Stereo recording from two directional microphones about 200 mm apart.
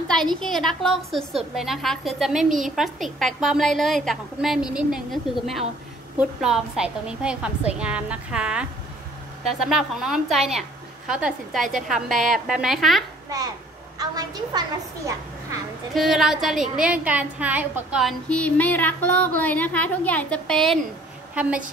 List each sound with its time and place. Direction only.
0.4 s a woman's voice: centre (ahead or behind)
13.9 s a woman's voice: 20° right (ahead or behind)
15.9 s a woman's voice: centre (ahead or behind)